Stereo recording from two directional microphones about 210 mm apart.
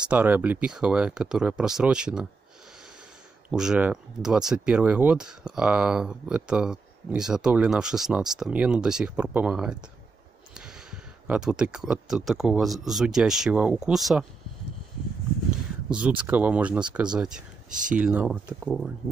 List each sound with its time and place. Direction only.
0.1 s speech: 5° right (ahead or behind)
3.4 s speech: 5° right (ahead or behind)
15.9 s speech: 5° right (ahead or behind)
17.6 s speech: 40° right (ahead or behind)
17.9 s speech: 5° right (ahead or behind)